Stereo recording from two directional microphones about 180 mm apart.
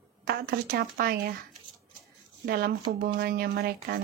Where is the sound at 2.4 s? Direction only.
60° right (ahead or behind).